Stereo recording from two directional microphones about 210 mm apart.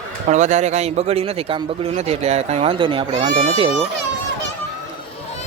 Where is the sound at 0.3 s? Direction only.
35° right (ahead or behind).